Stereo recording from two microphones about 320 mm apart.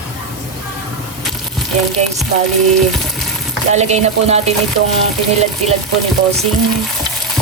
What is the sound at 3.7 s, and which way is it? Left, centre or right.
Speech, right.